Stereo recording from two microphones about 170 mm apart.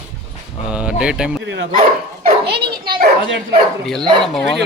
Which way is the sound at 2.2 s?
75° right (ahead or behind).